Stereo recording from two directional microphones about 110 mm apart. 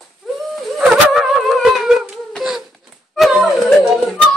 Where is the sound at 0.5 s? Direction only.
Centre (ahead or behind).